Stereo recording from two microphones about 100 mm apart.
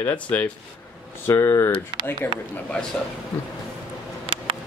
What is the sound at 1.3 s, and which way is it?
Speech, 30° left (ahead or behind).